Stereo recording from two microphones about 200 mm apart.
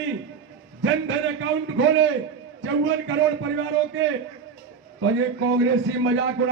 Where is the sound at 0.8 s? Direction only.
70° right (ahead or behind).